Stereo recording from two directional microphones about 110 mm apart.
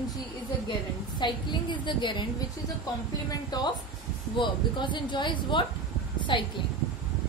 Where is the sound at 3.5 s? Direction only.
35° left (ahead or behind).